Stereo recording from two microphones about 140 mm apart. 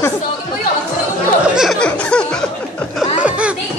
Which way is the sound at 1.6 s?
5° left (ahead or behind).